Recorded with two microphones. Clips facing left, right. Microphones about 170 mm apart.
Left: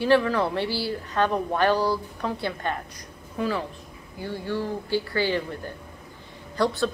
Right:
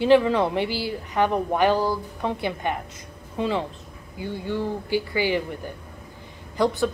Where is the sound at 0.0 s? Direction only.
20° right (ahead or behind).